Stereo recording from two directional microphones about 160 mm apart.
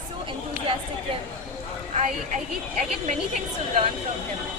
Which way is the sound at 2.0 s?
50° right (ahead or behind).